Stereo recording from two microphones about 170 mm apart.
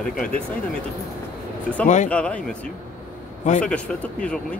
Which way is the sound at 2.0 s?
5° left (ahead or behind).